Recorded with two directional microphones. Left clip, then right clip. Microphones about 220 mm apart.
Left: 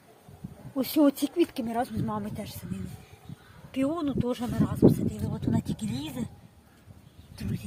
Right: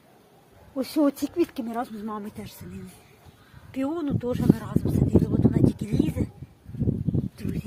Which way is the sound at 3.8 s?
Centre (ahead or behind).